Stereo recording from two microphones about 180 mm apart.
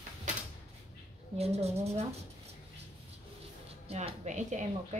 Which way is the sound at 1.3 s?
35° right (ahead or behind).